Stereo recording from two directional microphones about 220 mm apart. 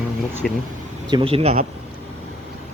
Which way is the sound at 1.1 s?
25° right (ahead or behind).